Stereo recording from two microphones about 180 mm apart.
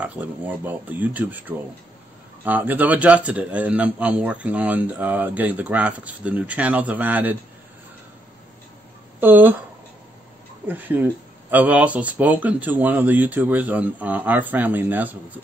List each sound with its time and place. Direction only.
0.0 s a man's voice: 10° right (ahead or behind)
2.4 s a man's voice: 10° right (ahead or behind)
9.2 s a man's voice: 10° right (ahead or behind)
10.7 s a man's voice: 10° right (ahead or behind)